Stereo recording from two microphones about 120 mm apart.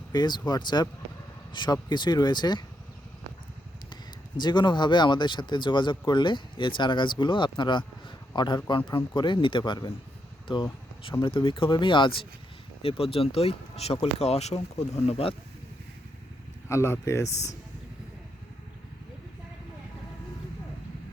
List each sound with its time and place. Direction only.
0.1 s speech: 40° left (ahead or behind)
4.4 s speech: 40° left (ahead or behind); by 15.4 s 60° left (ahead or behind)
16.6 s speech: 25° left (ahead or behind)